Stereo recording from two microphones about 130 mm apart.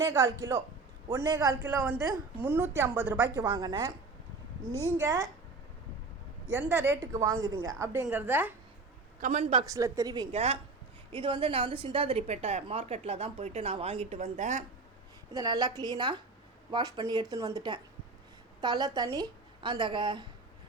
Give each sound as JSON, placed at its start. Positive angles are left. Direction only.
{"t": 0.0, "sound": "a woman's voice", "side_deg": -25}
{"t": 3.4, "sound": "a woman's voice", "side_deg": -35}
{"t": 4.9, "sound": "speech", "side_deg": -20}
{"t": 6.5, "sound": "a woman's voice", "side_deg": -15}
{"t": 9.4, "sound": "a woman's voice", "side_deg": -45}
{"t": 9.6, "sound": "speech", "side_deg": -25}
{"t": 10.3, "sound": "a woman's voice", "side_deg": -50}
{"t": 11.1, "sound": "a woman's voice", "side_deg": -40}
{"t": 15.3, "sound": "a woman's voice", "side_deg": -30}